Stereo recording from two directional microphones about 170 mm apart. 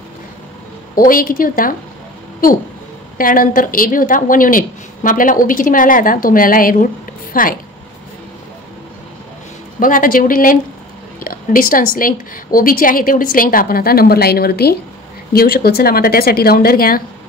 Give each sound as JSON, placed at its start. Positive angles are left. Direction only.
{"t": 0.9, "sound": "a woman's voice", "side_deg": 55}
{"t": 3.2, "sound": "a woman's voice", "side_deg": 55}
{"t": 9.8, "sound": "a woman's voice", "side_deg": 55}